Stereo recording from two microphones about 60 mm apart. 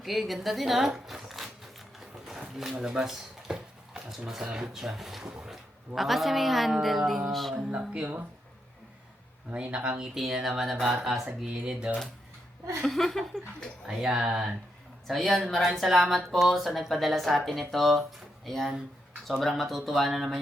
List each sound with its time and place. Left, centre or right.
0.0 s speech: centre
2.0 s a sound: centre
2.7 s speech: centre
7.5 s speech: centre
9.5 s speech: right
10.2 s speech: centre
12.8 s a sound: centre
13.8 s speech: centre
15.0 s speech: centre